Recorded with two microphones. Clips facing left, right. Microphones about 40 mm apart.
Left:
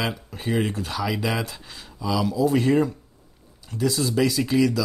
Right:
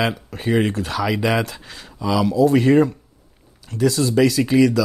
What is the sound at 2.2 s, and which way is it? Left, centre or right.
Speech, centre.